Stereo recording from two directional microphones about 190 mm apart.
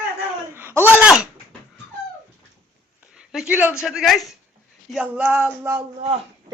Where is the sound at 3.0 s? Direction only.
5° right (ahead or behind).